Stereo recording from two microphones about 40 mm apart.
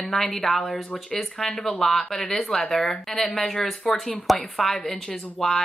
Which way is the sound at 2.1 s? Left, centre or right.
Left.